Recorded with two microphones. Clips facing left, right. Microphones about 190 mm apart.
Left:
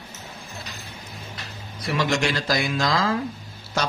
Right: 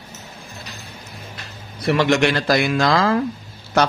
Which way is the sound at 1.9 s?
60° right (ahead or behind).